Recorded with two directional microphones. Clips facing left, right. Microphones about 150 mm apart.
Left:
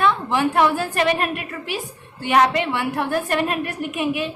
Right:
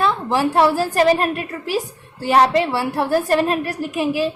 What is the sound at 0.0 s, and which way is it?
A woman's voice, 35° right (ahead or behind).